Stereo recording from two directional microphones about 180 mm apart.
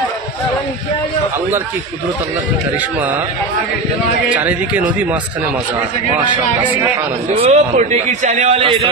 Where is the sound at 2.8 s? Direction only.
10° right (ahead or behind).